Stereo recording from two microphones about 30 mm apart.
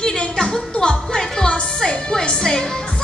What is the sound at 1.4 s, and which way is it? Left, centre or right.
Speech, left.